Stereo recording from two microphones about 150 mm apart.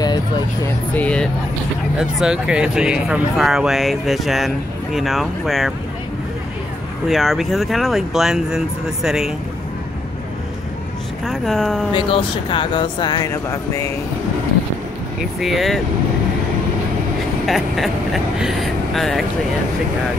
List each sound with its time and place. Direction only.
0.9 s speech: 10° left (ahead or behind)
2.0 s speech: 5° right (ahead or behind)
7.1 s speech: centre (ahead or behind)
11.2 s speech: centre (ahead or behind)
11.9 s speech: 35° left (ahead or behind)
15.4 s speech: centre (ahead or behind)
17.5 s speech: centre (ahead or behind)